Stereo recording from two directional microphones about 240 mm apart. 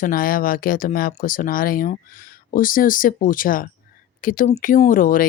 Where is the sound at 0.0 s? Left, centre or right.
Left.